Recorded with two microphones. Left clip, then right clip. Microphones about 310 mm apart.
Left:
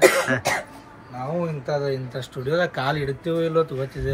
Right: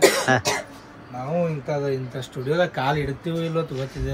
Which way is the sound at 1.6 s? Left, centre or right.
Centre.